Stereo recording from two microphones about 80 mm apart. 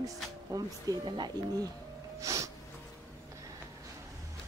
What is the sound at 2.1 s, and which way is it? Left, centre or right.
Music, right.